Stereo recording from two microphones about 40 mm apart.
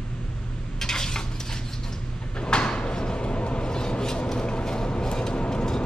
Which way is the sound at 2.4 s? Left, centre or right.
Left.